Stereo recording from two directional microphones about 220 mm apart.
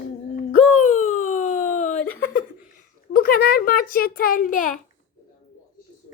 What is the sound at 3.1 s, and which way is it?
A child's voice, 45° left (ahead or behind).